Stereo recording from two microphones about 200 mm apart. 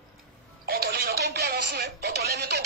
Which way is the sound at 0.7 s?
50° right (ahead or behind).